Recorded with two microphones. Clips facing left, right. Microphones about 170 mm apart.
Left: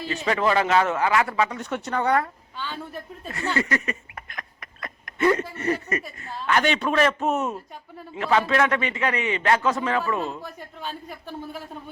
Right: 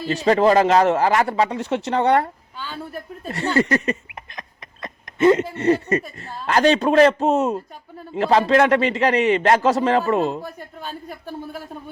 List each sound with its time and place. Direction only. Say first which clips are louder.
0.1 s speech: right 7 dB; 35° right (ahead or behind)
2.6 s a man's voice: right 2 dB; 10° right (ahead or behind)
3.2 s a sound: right 6 dB; 35° right (ahead or behind)
8.2 s speech: right 5 dB; 35° right (ahead or behind)
10.4 s a man's voice: right 2 dB; 5° right (ahead or behind)